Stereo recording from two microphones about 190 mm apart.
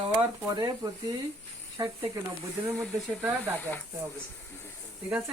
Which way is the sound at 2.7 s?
5° left (ahead or behind).